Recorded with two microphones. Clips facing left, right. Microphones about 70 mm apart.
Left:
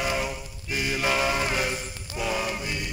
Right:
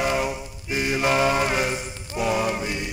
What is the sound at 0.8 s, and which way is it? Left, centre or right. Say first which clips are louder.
Mantra: right 4 dB; centre.